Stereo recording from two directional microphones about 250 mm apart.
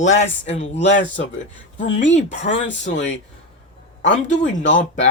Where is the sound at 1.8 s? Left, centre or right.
Left.